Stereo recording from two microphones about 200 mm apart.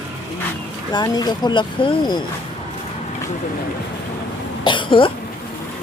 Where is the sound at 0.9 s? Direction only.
20° left (ahead or behind).